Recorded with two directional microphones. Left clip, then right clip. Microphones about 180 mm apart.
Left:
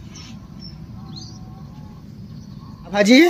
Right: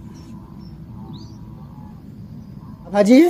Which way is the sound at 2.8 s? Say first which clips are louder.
Right 1 dB; 15° right (ahead or behind).